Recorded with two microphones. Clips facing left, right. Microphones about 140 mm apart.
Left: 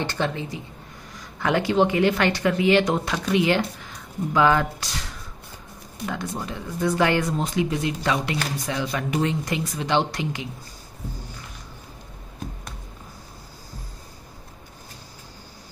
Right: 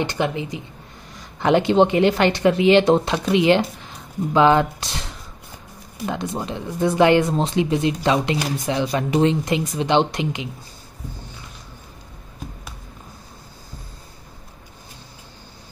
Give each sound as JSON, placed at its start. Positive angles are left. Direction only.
{"t": 0.0, "sound": "speech", "side_deg": -15}
{"t": 6.0, "sound": "speech", "side_deg": -25}